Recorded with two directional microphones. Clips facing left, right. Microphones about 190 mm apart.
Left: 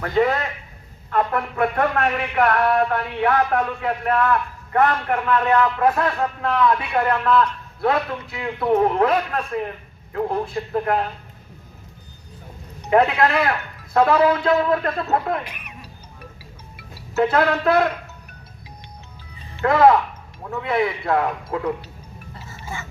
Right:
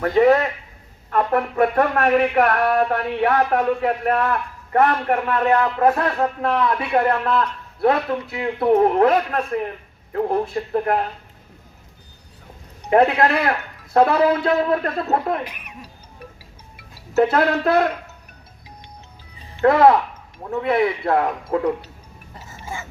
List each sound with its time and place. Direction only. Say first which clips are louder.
1.1 s speech: right 3 dB; 40° right (ahead or behind)
12.9 s speech: right 1 dB; 35° right (ahead or behind)
16.7 s music: right 4 dB; 40° right (ahead or behind)
19.6 s speech: right 1 dB; 35° right (ahead or behind)